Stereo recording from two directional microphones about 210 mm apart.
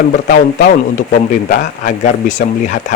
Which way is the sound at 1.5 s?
40° left (ahead or behind).